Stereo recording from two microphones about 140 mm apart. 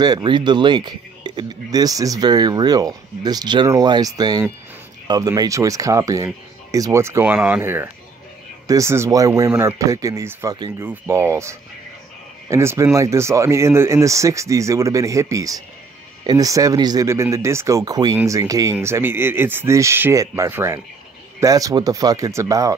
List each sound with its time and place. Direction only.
0.0 s speech: 30° right (ahead or behind)